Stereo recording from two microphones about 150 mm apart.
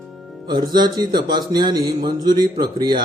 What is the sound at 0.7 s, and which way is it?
Speech, 30° right (ahead or behind).